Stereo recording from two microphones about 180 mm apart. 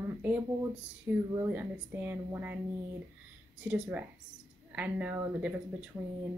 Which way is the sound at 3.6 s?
10° right (ahead or behind).